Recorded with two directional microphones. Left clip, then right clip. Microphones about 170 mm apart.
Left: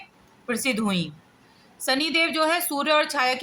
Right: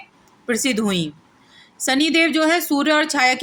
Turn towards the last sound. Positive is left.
turn(degrees=-25)  # may be behind; listen again after turning